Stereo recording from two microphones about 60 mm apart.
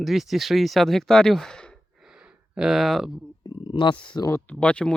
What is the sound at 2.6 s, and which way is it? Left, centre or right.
Speech, centre.